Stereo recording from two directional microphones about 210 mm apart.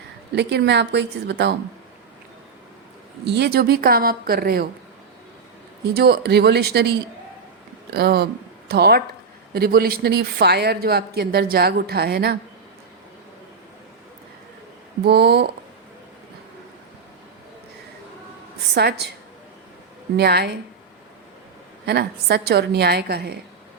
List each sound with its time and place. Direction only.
0.3 s speech: 55° right (ahead or behind)
3.2 s speech: 50° right (ahead or behind)
5.9 s speech: 50° right (ahead or behind)
7.9 s speech: 50° right (ahead or behind)
15.0 s speech: 50° right (ahead or behind)
18.7 s speech: 50° right (ahead or behind)
20.1 s speech: 50° right (ahead or behind)
21.8 s speech: 50° right (ahead or behind)